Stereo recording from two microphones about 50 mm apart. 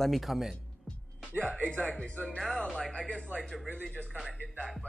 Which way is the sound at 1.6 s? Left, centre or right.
Left.